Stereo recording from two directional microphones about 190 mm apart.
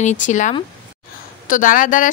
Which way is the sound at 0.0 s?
40° left (ahead or behind).